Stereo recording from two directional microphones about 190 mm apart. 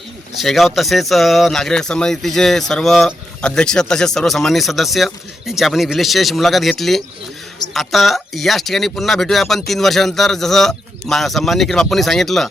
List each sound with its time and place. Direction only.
0.3 s speech: centre (ahead or behind)